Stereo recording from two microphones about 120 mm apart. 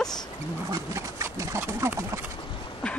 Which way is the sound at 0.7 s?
25° right (ahead or behind).